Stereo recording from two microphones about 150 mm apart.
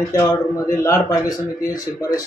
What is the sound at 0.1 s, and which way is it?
Speech, 20° left (ahead or behind).